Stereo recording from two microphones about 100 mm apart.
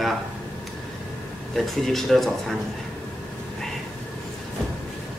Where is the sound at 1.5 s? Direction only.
Centre (ahead or behind).